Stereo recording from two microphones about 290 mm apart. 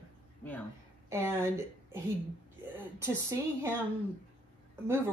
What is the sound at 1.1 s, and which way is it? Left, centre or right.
Speech, centre.